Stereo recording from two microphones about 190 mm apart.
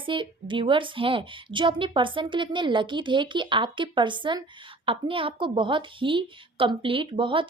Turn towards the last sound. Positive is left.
turn(degrees=-25)  # may be behind; listen again after turning